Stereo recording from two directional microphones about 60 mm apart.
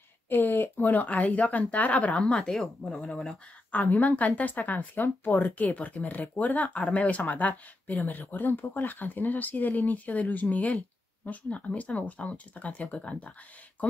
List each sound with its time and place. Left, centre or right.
0.3 s speech: left
2.1 s speech: centre
3.7 s speech: left